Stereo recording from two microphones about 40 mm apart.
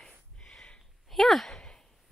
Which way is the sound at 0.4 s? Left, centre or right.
Centre.